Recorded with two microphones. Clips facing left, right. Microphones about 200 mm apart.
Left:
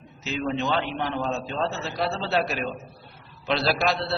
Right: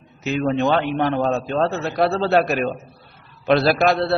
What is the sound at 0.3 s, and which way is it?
A man's voice, 55° right (ahead or behind).